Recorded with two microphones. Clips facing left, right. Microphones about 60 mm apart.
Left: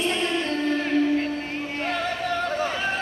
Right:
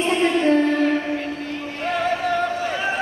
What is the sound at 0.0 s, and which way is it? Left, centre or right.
Music, right.